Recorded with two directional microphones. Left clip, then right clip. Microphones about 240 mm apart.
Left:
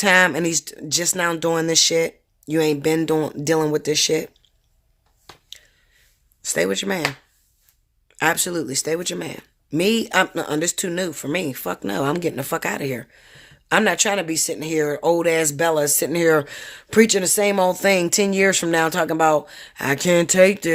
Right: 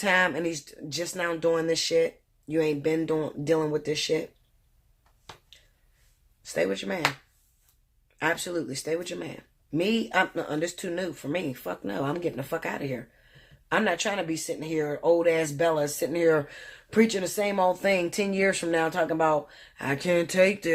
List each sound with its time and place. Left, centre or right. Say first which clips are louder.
0.0 s speech: left 8 dB; left
6.4 s speech: left 6 dB; left
8.2 s speech: left 7 dB; left